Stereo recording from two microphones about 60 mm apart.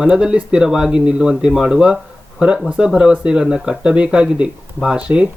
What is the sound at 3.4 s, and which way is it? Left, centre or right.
Speech, centre.